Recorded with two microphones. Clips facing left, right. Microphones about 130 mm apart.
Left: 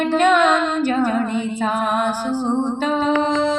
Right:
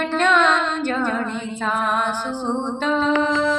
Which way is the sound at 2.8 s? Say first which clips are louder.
Right 1 dB; 10° left (ahead or behind).